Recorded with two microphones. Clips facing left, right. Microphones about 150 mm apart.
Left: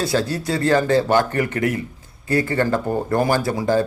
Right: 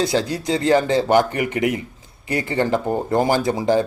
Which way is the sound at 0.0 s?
20° right (ahead or behind).